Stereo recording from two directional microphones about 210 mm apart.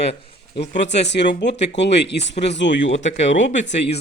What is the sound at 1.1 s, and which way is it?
A man's voice, 55° left (ahead or behind).